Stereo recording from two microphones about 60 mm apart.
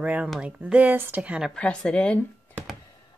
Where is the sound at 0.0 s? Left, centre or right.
Right.